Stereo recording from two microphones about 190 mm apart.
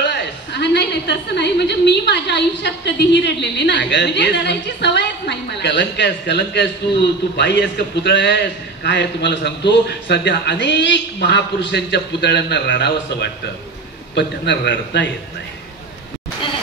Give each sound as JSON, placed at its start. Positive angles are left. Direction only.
{"t": 0.0, "sound": "a woman's voice", "side_deg": 65}